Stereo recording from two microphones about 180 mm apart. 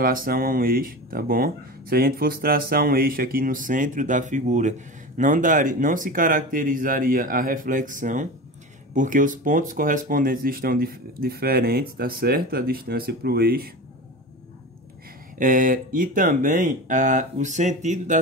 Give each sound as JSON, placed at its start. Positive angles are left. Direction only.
{"t": 0.0, "sound": "speech", "side_deg": -50}
{"t": 15.3, "sound": "speech", "side_deg": -50}